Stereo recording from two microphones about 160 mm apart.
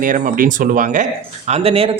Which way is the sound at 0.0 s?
60° right (ahead or behind).